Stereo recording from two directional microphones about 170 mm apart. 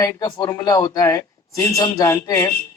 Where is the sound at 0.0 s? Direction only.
20° left (ahead or behind).